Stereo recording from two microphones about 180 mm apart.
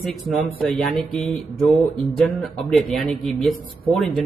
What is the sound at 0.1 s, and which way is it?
A man's voice, centre (ahead or behind).